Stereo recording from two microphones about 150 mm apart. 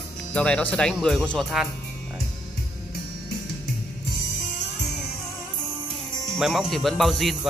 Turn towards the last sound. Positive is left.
turn(degrees=0)  # may be behind; listen again after turning